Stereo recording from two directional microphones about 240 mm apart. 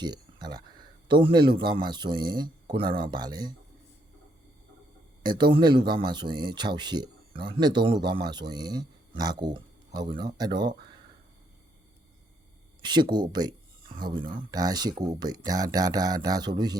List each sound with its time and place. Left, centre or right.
0.0 s speech: centre
5.2 s speech: centre
12.8 s speech: centre